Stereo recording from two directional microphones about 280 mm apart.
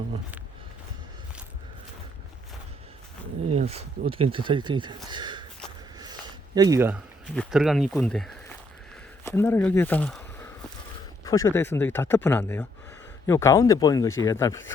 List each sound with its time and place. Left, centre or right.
3.5 s speech: right
6.0 s a sound: centre
7.3 s speech: centre